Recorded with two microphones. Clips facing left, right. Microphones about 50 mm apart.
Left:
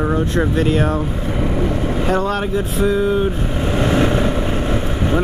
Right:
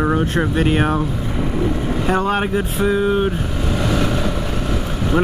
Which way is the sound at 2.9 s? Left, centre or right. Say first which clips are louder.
Even; right.